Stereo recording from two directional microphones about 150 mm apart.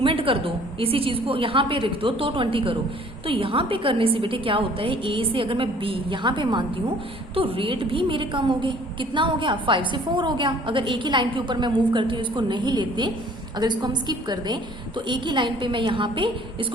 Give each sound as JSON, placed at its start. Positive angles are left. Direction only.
{"t": 0.0, "sound": "a woman's voice", "side_deg": -35}